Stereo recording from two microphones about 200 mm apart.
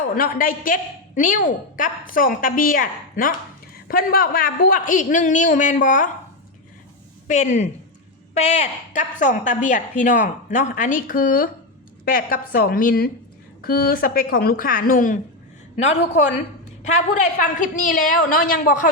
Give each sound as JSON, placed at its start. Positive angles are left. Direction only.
{"t": 0.2, "sound": "a woman's voice", "side_deg": 45}
{"t": 7.3, "sound": "a woman's voice", "side_deg": 40}
{"t": 17.4, "sound": "a woman's voice", "side_deg": 40}